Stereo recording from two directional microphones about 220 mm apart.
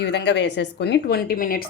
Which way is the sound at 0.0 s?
50° left (ahead or behind).